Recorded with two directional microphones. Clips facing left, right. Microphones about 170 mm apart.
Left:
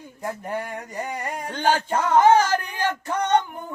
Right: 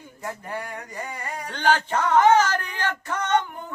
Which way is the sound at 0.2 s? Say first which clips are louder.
Left 4 dB; 20° left (ahead or behind).